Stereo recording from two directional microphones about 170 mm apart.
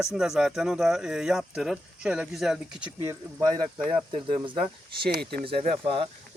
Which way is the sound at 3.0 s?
15° right (ahead or behind).